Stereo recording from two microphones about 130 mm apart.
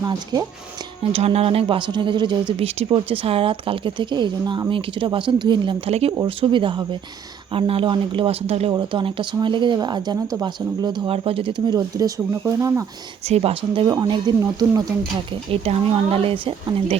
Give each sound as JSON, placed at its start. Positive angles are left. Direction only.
{"t": 0.0, "sound": "speech", "side_deg": -30}
{"t": 1.1, "sound": "speech", "side_deg": -50}
{"t": 2.5, "sound": "speech", "side_deg": -50}
{"t": 8.7, "sound": "speech", "side_deg": -40}
{"t": 11.8, "sound": "speech", "side_deg": -25}
{"t": 13.2, "sound": "speech", "side_deg": -50}
{"t": 13.9, "sound": "speech", "side_deg": -30}
{"t": 15.5, "sound": "speech", "side_deg": -45}